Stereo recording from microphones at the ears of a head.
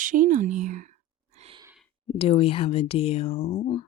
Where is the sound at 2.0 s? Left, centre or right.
Left.